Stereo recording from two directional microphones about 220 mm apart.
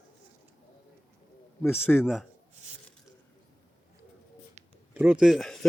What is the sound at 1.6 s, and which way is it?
Speech, 10° left (ahead or behind).